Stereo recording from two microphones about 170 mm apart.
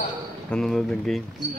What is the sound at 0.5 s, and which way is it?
Speech, centre (ahead or behind).